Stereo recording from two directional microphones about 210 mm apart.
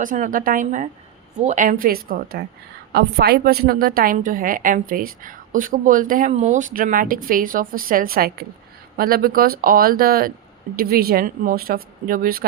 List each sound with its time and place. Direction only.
0.0 s a woman's voice: 40° right (ahead or behind)